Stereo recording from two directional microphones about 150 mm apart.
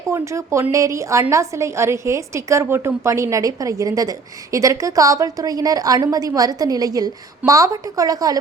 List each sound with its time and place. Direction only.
0.1 s a woman's voice: 20° right (ahead or behind)